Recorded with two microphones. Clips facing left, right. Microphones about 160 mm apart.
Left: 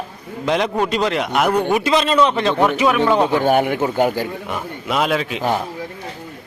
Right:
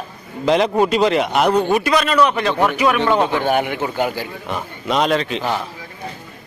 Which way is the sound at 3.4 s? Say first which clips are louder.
Left 3 dB; 45° left (ahead or behind).